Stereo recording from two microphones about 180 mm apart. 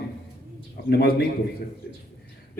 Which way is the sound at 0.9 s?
60° left (ahead or behind).